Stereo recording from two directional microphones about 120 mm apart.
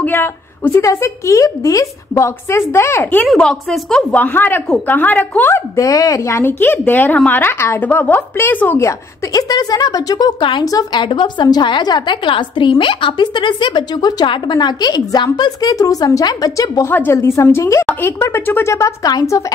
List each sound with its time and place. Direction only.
0.0 s speech: 15° left (ahead or behind)
3.3 s a woman's voice: 5° left (ahead or behind)
5.8 s a woman's voice: 30° left (ahead or behind)